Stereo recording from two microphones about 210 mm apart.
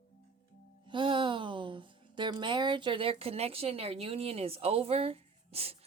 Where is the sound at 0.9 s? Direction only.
25° right (ahead or behind).